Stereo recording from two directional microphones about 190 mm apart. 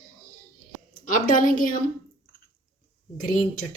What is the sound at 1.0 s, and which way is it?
Speech, 45° left (ahead or behind).